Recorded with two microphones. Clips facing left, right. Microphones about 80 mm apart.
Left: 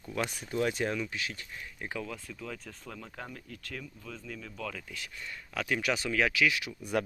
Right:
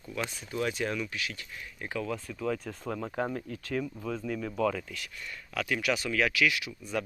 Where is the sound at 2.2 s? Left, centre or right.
Centre.